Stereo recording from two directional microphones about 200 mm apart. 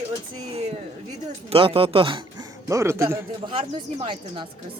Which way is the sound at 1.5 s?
25° right (ahead or behind).